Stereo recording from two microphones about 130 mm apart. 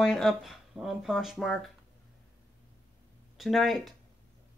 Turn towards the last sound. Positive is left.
turn(degrees=0)  # may be behind; listen again after turning